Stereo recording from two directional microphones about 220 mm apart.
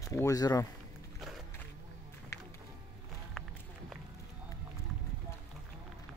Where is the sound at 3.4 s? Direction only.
Centre (ahead or behind).